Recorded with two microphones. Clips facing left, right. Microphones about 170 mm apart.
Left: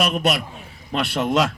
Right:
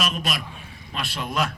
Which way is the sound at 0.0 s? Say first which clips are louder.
Left 7 dB; 65° left (ahead or behind).